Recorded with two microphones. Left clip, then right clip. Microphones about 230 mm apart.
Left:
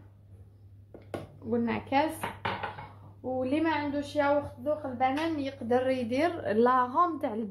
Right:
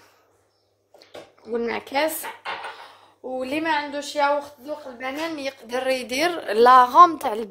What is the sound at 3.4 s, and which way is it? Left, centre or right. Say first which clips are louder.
A woman's voice: right 5 dB; right.